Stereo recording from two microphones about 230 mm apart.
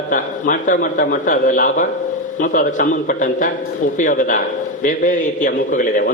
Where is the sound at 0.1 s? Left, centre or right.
Left.